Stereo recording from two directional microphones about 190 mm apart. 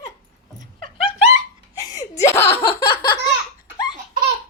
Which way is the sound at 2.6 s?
25° left (ahead or behind).